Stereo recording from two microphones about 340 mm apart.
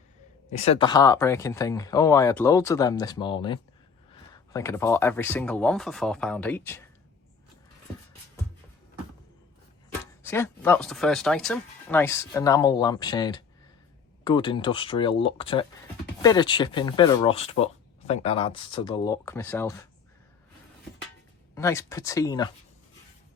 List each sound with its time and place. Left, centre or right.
0.6 s speech: centre
10.2 s speech: centre
21.5 s speech: centre